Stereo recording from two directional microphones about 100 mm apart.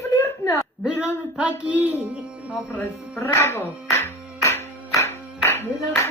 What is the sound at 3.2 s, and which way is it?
Hands, 20° left (ahead or behind).